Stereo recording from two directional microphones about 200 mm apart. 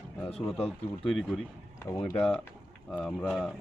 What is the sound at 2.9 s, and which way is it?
Speech, 5° left (ahead or behind).